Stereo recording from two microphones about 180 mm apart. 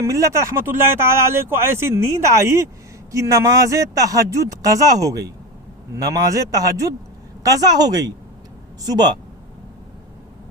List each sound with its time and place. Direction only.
0.0 s a woman's voice: 15° right (ahead or behind)